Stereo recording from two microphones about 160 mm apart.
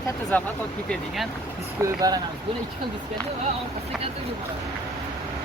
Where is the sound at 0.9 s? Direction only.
Centre (ahead or behind).